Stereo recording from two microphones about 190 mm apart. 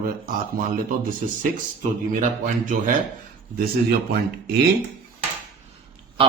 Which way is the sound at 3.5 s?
55° right (ahead or behind).